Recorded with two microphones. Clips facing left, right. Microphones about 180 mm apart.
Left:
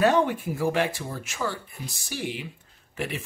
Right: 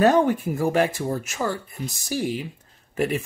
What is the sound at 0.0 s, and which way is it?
Speech, 45° right (ahead or behind).